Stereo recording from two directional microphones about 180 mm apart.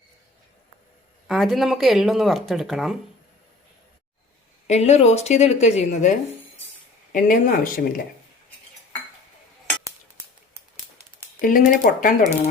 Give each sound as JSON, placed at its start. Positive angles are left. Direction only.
{"t": 1.3, "sound": "speech", "side_deg": 0}
{"t": 4.6, "sound": "speech", "side_deg": 40}
{"t": 11.3, "sound": "speech", "side_deg": 50}